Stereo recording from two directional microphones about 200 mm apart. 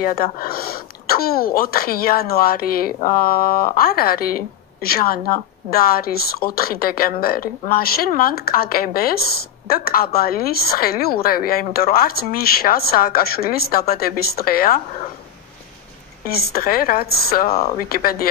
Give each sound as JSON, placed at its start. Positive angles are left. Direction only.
{"t": 0.0, "sound": "speech", "side_deg": 45}
{"t": 16.3, "sound": "speech", "side_deg": 50}